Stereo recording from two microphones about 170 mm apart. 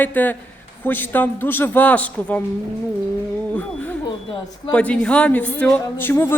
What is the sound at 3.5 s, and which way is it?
Speech, 10° left (ahead or behind).